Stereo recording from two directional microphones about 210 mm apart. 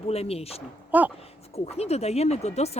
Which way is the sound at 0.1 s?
30° left (ahead or behind).